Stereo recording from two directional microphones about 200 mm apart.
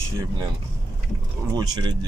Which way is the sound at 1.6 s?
20° right (ahead or behind).